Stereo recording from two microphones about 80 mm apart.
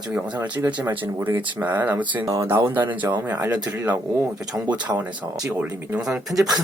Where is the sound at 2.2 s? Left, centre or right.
Right.